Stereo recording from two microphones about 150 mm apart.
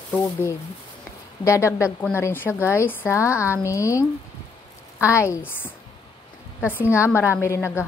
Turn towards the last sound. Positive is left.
turn(degrees=15)  # may be behind; listen again after turning